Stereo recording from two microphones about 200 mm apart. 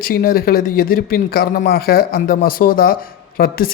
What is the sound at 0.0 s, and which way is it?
Speech, 45° left (ahead or behind).